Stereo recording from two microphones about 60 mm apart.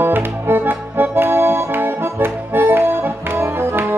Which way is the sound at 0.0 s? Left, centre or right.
Right.